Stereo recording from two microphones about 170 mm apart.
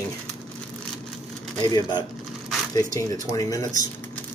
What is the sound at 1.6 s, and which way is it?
A man's voice, 20° left (ahead or behind).